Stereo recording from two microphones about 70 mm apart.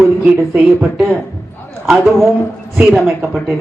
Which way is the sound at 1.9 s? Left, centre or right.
Centre.